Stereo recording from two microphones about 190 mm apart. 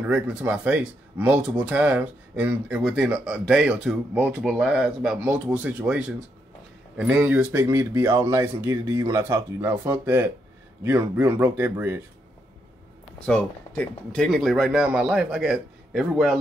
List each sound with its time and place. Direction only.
0.0 s speech: 5° right (ahead or behind)
13.2 s speech: 5° left (ahead or behind)